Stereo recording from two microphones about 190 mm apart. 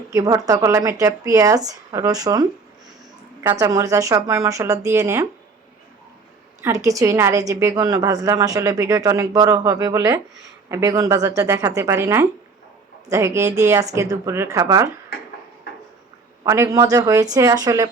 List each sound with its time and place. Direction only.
0.1 s a woman's voice: 15° right (ahead or behind)
6.6 s a woman's voice: 15° right (ahead or behind)
16.4 s a woman's voice: 15° right (ahead or behind)